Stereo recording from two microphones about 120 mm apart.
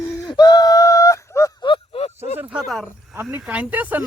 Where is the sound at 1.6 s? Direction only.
45° left (ahead or behind).